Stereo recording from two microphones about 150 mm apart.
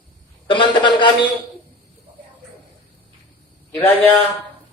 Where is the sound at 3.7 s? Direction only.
10° left (ahead or behind).